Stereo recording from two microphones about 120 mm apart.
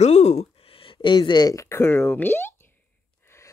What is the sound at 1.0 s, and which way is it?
Speech, 40° left (ahead or behind).